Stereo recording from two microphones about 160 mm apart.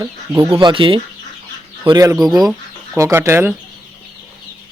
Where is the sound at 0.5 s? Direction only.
30° right (ahead or behind); by 3.5 s 15° right (ahead or behind).